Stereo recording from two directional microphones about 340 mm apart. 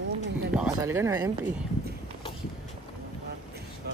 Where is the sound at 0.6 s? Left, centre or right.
Centre.